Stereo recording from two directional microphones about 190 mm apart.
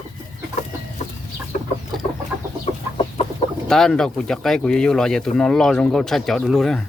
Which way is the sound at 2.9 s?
30° left (ahead or behind).